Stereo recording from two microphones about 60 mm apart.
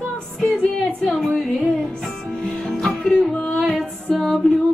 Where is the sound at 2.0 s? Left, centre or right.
Centre.